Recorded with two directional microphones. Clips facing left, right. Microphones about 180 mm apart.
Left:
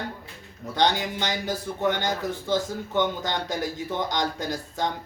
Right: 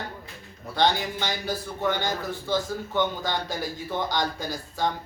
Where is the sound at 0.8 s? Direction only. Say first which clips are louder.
Even; 15° left (ahead or behind).